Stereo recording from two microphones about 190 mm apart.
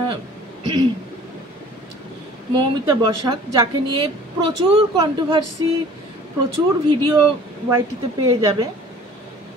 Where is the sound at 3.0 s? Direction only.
20° right (ahead or behind).